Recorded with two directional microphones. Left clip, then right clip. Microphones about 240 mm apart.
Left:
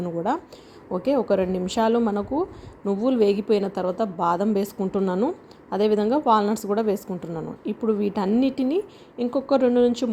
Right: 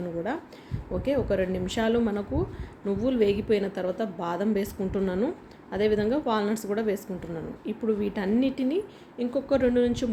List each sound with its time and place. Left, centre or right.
1.0 s a woman's voice: left